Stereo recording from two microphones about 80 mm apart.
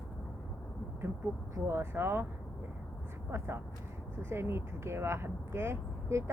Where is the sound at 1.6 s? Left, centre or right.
Right.